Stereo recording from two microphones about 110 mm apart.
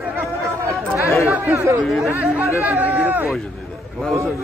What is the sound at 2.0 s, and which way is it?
Speech, 15° right (ahead or behind).